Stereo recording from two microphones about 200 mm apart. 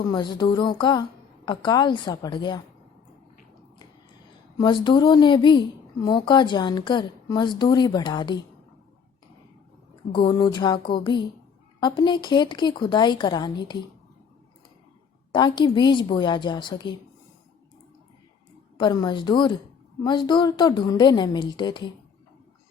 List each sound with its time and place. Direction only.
0.0 s a woman's voice: 25° left (ahead or behind)
4.5 s a woman's voice: 20° left (ahead or behind)
10.1 s a woman's voice: 25° left (ahead or behind)
15.3 s a woman's voice: 25° left (ahead or behind)
18.8 s a woman's voice: 20° left (ahead or behind)